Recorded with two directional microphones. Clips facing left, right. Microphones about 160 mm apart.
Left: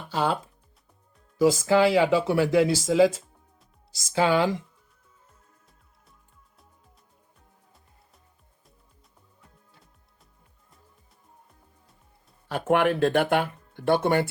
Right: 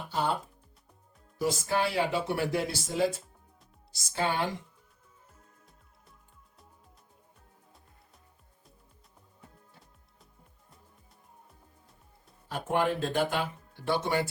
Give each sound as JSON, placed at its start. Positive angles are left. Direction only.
{"t": 0.1, "sound": "speech", "side_deg": 90}
{"t": 12.5, "sound": "speech", "side_deg": 75}